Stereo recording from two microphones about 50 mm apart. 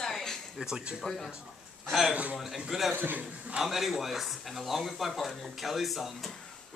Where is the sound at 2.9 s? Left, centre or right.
Right.